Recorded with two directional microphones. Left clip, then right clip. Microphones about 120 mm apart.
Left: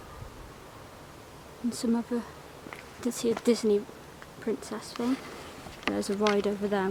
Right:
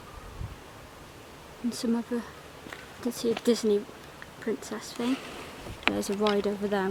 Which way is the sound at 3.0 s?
50° left (ahead or behind).